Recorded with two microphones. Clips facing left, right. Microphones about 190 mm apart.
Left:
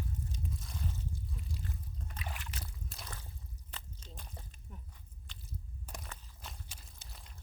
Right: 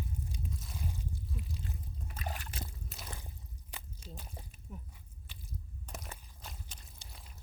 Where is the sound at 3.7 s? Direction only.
10° right (ahead or behind).